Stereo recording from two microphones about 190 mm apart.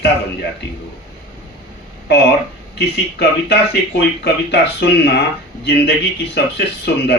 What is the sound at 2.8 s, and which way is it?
Speech, 60° left (ahead or behind).